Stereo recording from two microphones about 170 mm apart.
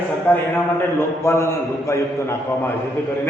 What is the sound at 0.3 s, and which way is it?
A man's voice, 10° left (ahead or behind).